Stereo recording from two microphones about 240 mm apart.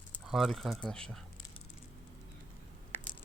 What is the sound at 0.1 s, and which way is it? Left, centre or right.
Speech, centre.